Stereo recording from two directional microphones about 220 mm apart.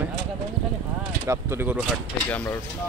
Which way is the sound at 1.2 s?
10° right (ahead or behind).